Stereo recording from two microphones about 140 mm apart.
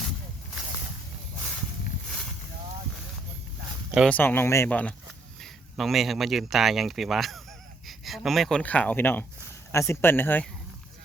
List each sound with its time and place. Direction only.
4.1 s speech: 15° left (ahead or behind)
5.4 s speech: centre (ahead or behind)